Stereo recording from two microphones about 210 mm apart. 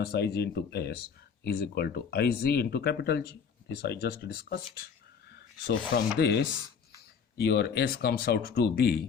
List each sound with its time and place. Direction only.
0.0 s speech: 50° left (ahead or behind)